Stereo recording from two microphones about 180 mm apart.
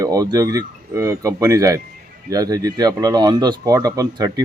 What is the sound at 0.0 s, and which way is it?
Speech, 20° right (ahead or behind).